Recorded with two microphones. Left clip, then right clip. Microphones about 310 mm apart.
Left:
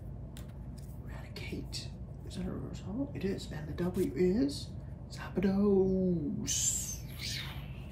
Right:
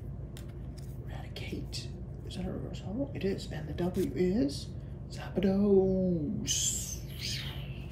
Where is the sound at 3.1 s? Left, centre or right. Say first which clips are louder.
Right 3 dB; left.